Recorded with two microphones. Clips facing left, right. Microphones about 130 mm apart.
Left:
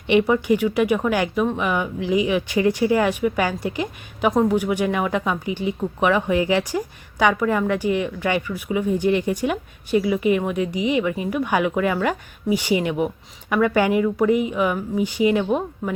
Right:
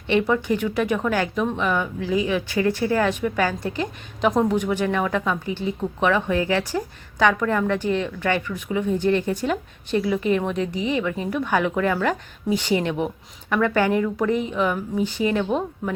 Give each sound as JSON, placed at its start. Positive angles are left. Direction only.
{"t": 0.1, "sound": "speech", "side_deg": 15}